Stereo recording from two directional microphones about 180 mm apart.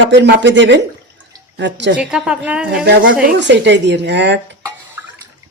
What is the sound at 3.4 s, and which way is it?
Speech, 75° right (ahead or behind).